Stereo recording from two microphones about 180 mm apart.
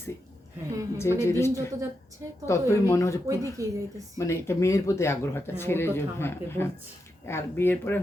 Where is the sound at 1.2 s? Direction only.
15° left (ahead or behind).